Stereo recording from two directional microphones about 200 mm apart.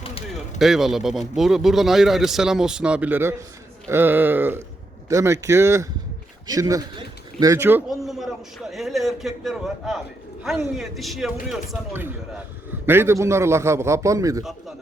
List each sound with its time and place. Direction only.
0.0 s a sound: 30° left (ahead or behind)
0.6 s a man's voice: centre (ahead or behind)
12.8 s a man's voice: 10° right (ahead or behind)